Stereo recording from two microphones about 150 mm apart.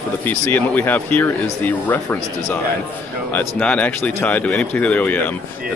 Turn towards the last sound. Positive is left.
turn(degrees=10)  # may be behind; listen again after turning